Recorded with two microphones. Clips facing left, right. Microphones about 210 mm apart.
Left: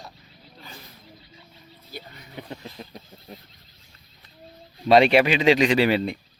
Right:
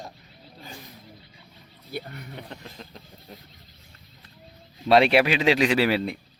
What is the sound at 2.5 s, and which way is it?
Speech, 10° left (ahead or behind).